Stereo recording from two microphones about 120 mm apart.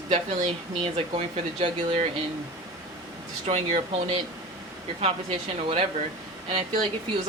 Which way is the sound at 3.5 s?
55° right (ahead or behind).